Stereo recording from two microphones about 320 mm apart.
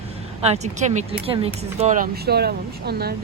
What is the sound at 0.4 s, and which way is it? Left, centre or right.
Speech, centre.